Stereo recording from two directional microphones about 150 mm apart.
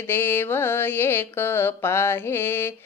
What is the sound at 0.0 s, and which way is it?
Speech, 15° left (ahead or behind).